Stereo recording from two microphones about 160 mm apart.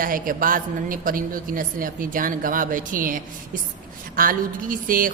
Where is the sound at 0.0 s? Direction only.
60° right (ahead or behind).